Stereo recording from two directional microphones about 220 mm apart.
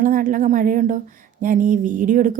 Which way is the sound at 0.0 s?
40° right (ahead or behind).